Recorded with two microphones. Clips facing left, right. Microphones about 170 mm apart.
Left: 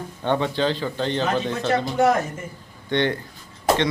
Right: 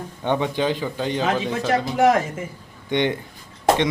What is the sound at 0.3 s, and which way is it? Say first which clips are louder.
A man's voice: even; 15° right (ahead or behind).